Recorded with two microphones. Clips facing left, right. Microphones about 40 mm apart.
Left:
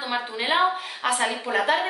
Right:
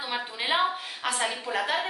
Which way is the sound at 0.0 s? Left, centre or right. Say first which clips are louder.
Left 4 dB; centre.